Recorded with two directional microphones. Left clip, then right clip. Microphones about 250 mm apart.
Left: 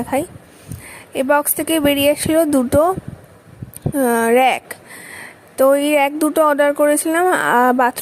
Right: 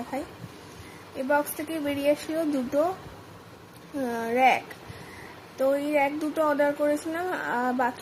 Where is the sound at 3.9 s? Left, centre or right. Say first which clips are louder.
Left 13 dB; left.